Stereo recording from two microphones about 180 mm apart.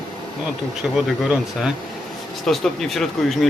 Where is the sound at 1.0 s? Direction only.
5° right (ahead or behind).